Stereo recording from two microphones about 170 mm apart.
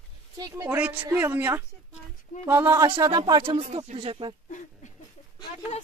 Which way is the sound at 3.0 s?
25° right (ahead or behind).